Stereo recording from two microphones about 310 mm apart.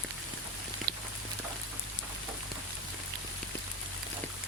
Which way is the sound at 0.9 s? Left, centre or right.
Right.